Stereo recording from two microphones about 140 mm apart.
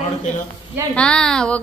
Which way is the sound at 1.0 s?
5° left (ahead or behind).